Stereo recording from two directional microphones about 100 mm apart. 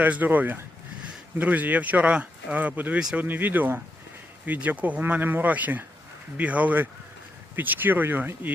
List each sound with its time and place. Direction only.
0.0 s speech: 15° right (ahead or behind)
3.0 s speech: 5° right (ahead or behind)
3.2 s speech: 20° right (ahead or behind)